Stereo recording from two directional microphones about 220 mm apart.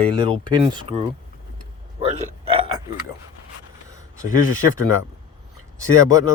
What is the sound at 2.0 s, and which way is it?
Burping, 30° right (ahead or behind).